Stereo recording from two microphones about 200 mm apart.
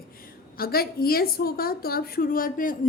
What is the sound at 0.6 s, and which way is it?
A woman's voice, 50° left (ahead or behind).